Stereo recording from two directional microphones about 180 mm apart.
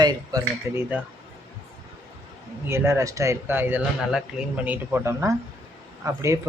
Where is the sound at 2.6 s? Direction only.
15° right (ahead or behind).